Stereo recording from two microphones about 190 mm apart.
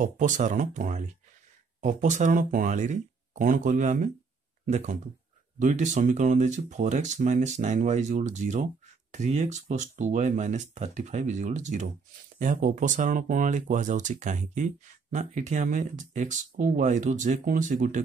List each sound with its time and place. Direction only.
0.0 s speech: 40° right (ahead or behind)